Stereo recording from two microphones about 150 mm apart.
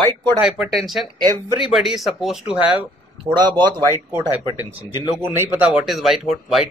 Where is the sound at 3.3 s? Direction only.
30° right (ahead or behind).